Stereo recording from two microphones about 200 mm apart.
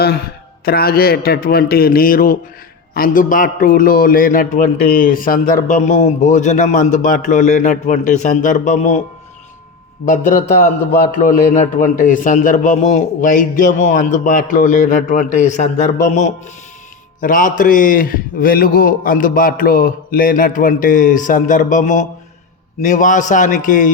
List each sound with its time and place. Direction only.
0.6 s a man's voice: 50° left (ahead or behind)
10.1 s a man's voice: 40° left (ahead or behind)